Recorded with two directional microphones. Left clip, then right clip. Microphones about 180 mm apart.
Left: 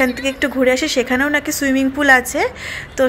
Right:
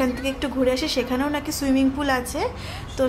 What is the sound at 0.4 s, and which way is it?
A woman's voice, 20° left (ahead or behind).